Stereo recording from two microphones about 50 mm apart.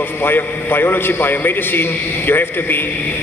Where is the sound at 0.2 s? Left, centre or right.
Left.